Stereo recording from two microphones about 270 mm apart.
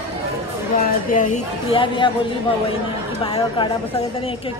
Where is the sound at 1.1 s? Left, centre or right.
Left.